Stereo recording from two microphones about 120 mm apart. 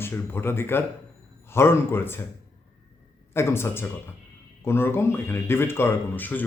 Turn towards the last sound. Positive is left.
turn(degrees=15)  # may be behind; listen again after turning